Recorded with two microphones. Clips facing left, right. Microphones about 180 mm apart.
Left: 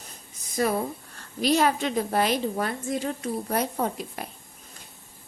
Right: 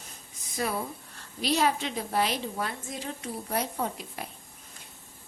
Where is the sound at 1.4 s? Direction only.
50° left (ahead or behind).